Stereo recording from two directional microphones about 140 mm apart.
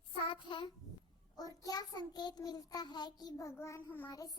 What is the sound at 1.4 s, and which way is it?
Child singing, 25° left (ahead or behind).